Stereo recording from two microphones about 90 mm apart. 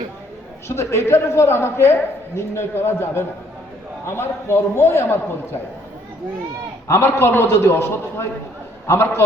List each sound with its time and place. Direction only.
0.7 s a woman's voice: 30° left (ahead or behind)
6.8 s a woman's voice: 30° left (ahead or behind)